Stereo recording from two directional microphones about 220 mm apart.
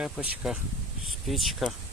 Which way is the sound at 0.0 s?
5° right (ahead or behind).